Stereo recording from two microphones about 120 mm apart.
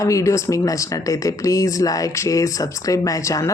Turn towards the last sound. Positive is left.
turn(degrees=30)  # may be behind; listen again after turning